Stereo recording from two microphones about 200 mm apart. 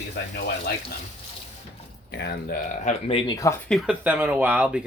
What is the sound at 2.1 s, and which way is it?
Speech, 55° left (ahead or behind).